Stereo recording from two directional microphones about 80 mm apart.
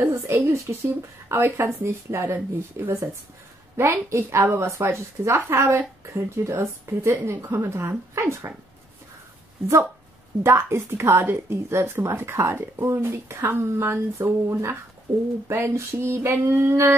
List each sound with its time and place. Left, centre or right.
0.0 s speech: right
10.4 s speech: right